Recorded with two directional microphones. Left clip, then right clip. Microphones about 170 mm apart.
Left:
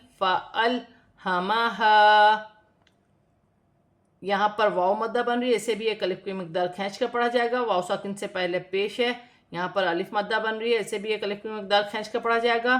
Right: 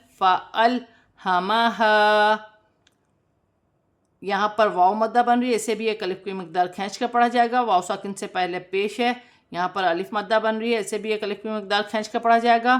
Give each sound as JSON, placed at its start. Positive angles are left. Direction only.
{"t": 0.2, "sound": "speech", "side_deg": -30}
{"t": 4.2, "sound": "a woman's voice", "side_deg": -25}